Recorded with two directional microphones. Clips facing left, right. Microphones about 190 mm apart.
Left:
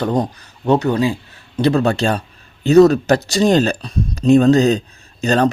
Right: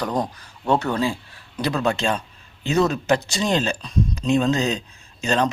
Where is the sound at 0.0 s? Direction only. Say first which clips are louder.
Left 6 dB; 25° left (ahead or behind).